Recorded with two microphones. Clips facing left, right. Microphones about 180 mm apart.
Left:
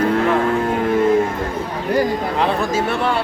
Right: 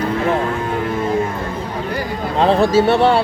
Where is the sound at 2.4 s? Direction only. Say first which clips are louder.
Right 8 dB; 30° right (ahead or behind).